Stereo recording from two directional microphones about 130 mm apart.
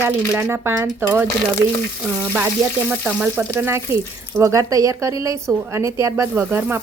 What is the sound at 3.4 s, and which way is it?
Speech, 20° right (ahead or behind).